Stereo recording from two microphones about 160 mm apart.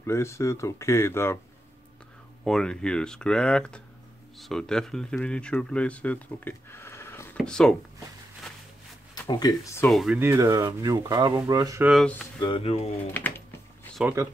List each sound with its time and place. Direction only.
0.0 s speech: 15° left (ahead or behind)
2.4 s speech: 5° left (ahead or behind)
7.3 s speech: 5° left (ahead or behind)
9.3 s speech: 25° left (ahead or behind)
9.8 s speech: centre (ahead or behind)
10.1 s speech: 15° right (ahead or behind)
11.8 s speech: centre (ahead or behind)
12.4 s speech: 30° left (ahead or behind)
13.1 s a sound: 10° left (ahead or behind)